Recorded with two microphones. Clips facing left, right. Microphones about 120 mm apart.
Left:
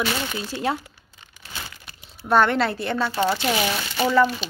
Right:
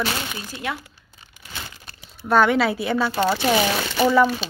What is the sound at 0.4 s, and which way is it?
Speech, 30° left (ahead or behind).